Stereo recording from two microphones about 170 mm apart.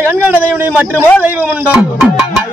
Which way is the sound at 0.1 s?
10° right (ahead or behind).